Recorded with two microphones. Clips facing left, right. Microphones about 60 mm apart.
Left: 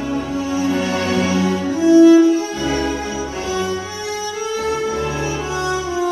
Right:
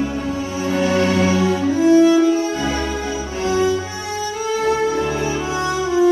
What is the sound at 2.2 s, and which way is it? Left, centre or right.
Music, right.